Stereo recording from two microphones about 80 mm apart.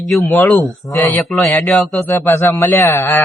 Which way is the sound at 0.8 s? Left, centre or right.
Left.